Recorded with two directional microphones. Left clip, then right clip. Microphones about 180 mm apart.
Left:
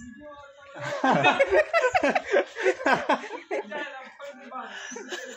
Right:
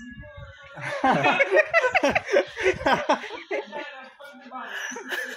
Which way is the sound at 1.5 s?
30° right (ahead or behind).